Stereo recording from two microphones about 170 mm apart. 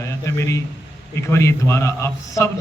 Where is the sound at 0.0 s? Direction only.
15° left (ahead or behind).